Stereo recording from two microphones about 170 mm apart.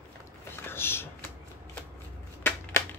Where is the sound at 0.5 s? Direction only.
15° left (ahead or behind).